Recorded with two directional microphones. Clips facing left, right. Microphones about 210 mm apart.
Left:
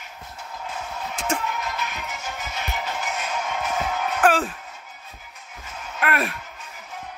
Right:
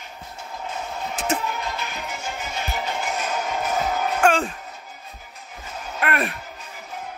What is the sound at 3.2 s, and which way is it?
Music, 40° right (ahead or behind).